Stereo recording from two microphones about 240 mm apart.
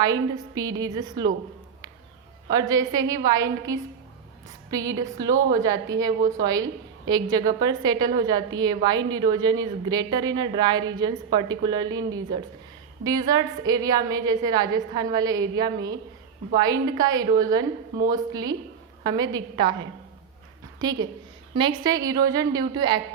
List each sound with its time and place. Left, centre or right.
0.0 s a woman's voice: centre
2.5 s a woman's voice: centre